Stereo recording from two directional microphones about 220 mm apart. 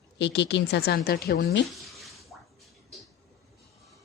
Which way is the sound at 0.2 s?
50° left (ahead or behind).